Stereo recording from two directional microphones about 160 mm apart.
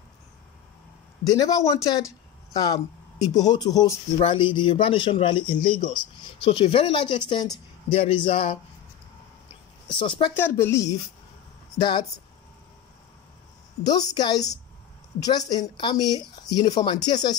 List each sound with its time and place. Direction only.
1.2 s speech: 25° left (ahead or behind)
9.9 s speech: 30° left (ahead or behind)
10.3 s a woman's voice: 15° left (ahead or behind)
13.8 s a woman's voice: 25° left (ahead or behind)